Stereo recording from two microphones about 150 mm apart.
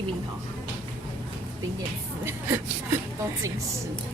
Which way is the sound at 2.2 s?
15° right (ahead or behind).